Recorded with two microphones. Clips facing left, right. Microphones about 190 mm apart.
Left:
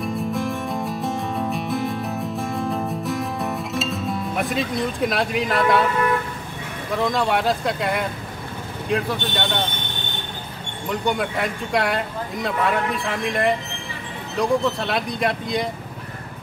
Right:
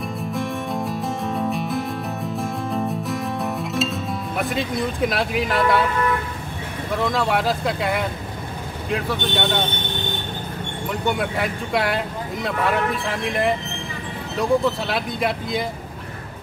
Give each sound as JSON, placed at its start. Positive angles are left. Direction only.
{"t": 0.0, "sound": "music", "side_deg": 0}
{"t": 7.0, "sound": "speech", "side_deg": 0}
{"t": 10.9, "sound": "speech", "side_deg": 0}